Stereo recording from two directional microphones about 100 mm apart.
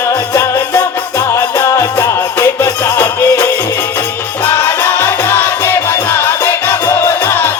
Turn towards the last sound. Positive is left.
turn(degrees=20)  # may be behind; listen again after turning